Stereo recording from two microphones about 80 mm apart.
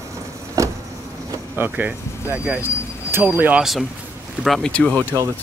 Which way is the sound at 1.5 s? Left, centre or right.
Right.